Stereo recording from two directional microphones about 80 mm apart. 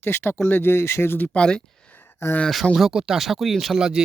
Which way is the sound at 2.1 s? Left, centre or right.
Left.